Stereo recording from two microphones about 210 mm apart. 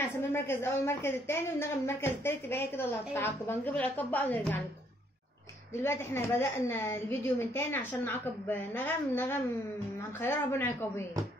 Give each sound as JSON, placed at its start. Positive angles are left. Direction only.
{"t": 0.3, "sound": "a woman's voice", "side_deg": 10}
{"t": 5.8, "sound": "a woman's voice", "side_deg": 10}